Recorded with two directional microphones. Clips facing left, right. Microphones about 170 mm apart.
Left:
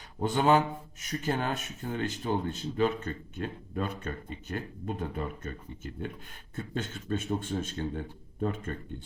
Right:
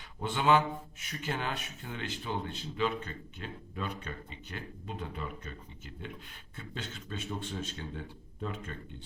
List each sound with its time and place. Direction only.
0.2 s a man's voice: 40° left (ahead or behind)